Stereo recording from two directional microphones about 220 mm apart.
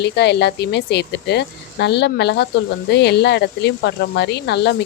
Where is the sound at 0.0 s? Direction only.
50° left (ahead or behind).